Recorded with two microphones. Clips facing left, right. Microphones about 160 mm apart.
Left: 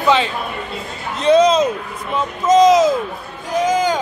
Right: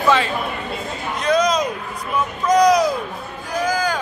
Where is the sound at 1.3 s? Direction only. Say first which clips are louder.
Left 6 dB; 30° left (ahead or behind).